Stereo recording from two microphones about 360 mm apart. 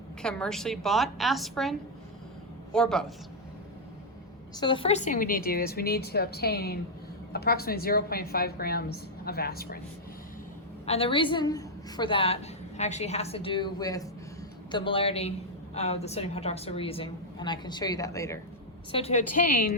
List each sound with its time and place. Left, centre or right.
0.2 s a woman's voice: centre
2.7 s a woman's voice: centre
4.5 s a woman's voice: centre
10.8 s a woman's voice: centre